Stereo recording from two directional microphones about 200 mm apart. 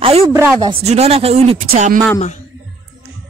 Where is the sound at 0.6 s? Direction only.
30° right (ahead or behind).